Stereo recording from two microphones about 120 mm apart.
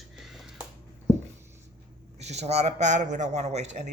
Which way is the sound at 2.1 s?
65° right (ahead or behind).